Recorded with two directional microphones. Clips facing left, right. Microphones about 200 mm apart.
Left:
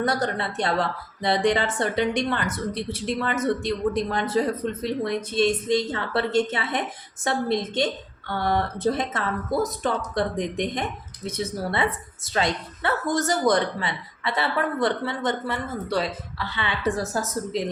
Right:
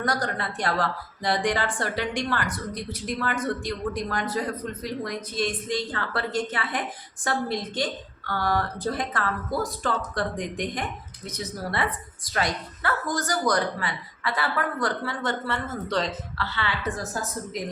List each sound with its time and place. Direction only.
0.0 s a woman's voice: 25° left (ahead or behind)
17.5 s a woman's voice: 30° left (ahead or behind)